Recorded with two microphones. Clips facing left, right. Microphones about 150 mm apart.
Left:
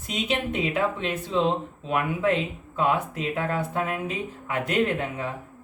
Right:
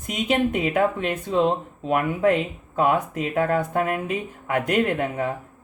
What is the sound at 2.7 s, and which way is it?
Speech, 50° right (ahead or behind).